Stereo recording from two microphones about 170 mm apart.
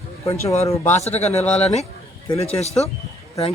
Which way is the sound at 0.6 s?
15° left (ahead or behind).